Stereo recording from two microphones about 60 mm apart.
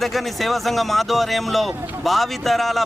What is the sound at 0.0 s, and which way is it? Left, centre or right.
Speech, centre.